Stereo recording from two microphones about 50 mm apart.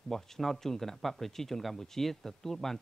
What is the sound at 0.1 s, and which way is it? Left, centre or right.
Speech, centre.